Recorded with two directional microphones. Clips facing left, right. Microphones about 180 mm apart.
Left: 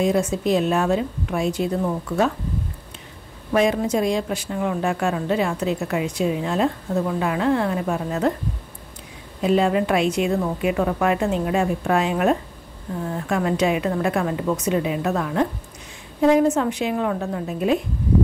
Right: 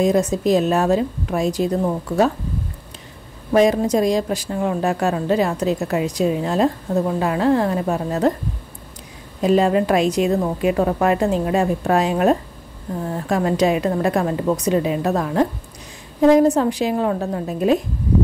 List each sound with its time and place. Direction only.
0.0 s a woman's voice: 40° right (ahead or behind)
3.5 s a woman's voice: 40° right (ahead or behind)
9.4 s a woman's voice: 40° right (ahead or behind)